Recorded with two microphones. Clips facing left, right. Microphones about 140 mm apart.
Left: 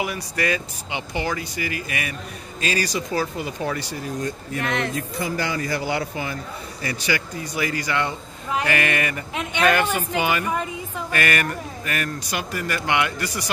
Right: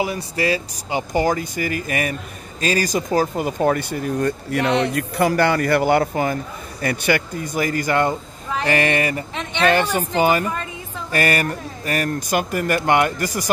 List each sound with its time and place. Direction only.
0.0 s a woman's voice: 30° right (ahead or behind)
9.3 s speech: 10° left (ahead or behind)
9.6 s a woman's voice: 30° right (ahead or behind)
10.5 s a sound: 15° left (ahead or behind)
11.1 s speech: 35° right (ahead or behind)